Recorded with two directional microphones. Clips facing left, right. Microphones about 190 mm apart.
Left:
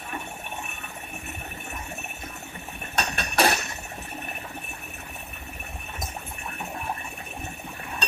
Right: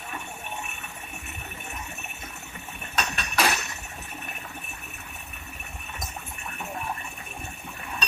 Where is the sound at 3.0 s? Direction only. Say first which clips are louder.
Left 3 dB; 35° left (ahead or behind).